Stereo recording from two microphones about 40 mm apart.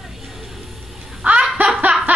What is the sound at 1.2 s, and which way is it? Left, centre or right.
Snicker, right.